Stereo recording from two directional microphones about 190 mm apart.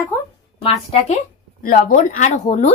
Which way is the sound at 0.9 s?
35° left (ahead or behind).